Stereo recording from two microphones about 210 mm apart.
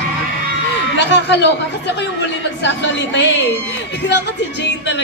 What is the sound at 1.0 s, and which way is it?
Speech, 55° left (ahead or behind).